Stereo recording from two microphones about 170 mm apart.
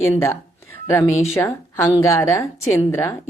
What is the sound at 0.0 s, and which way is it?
A woman's voice, 15° left (ahead or behind).